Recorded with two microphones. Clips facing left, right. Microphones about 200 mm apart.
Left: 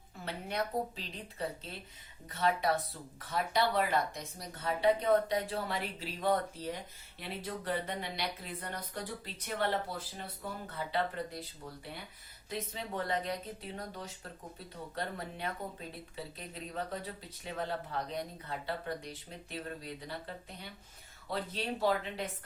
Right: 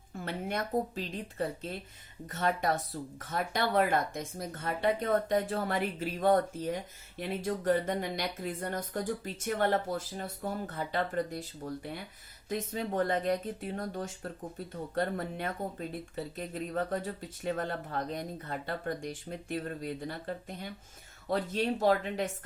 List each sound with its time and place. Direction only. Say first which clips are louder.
0.3 s speech: right 2 dB; 50° right (ahead or behind)